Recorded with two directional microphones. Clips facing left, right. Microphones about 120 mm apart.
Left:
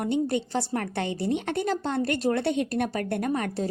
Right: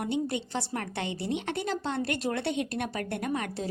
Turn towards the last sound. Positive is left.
turn(degrees=40)  # may be behind; listen again after turning